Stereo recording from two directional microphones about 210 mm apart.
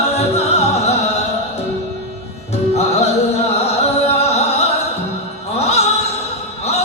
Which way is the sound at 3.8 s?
30° left (ahead or behind).